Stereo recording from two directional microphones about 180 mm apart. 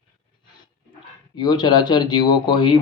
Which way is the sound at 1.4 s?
25° left (ahead or behind).